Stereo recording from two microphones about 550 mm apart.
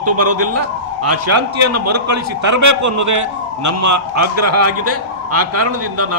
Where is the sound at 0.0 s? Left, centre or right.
Right.